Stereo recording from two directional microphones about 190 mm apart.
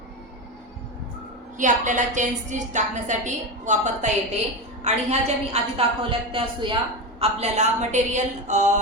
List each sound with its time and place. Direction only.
1.5 s a woman's voice: 40° right (ahead or behind)